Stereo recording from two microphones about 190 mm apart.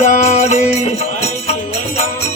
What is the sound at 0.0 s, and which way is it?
Music, 40° left (ahead or behind).